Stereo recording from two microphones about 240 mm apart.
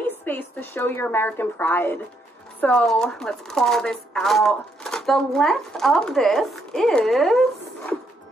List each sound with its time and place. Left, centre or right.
0.2 s a woman's voice: centre